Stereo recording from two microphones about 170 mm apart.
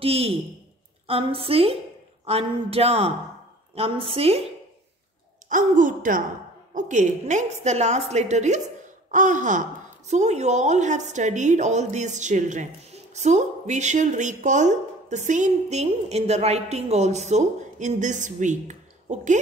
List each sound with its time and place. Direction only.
0.0 s speech: 35° right (ahead or behind)
5.5 s speech: 50° right (ahead or behind)